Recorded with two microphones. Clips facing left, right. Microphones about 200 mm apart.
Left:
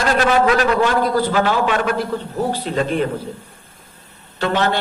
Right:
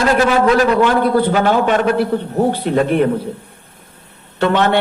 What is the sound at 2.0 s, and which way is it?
A man's voice, 60° right (ahead or behind).